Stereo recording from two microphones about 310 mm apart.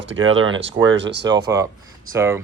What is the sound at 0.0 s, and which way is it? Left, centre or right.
Speech, right.